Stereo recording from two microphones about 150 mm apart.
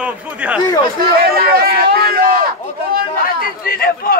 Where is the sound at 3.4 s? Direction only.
80° left.